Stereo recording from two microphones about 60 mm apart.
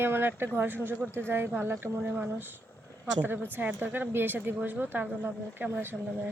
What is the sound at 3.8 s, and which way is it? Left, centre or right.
Speech, right.